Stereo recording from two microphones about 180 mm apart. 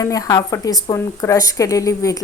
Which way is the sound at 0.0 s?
20° left (ahead or behind).